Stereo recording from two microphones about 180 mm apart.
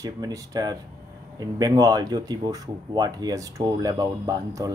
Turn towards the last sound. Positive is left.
turn(degrees=-20)  # may be behind; listen again after turning